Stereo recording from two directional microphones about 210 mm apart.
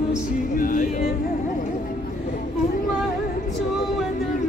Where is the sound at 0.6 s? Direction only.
40° left (ahead or behind).